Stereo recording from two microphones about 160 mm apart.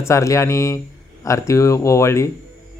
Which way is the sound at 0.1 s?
20° left (ahead or behind).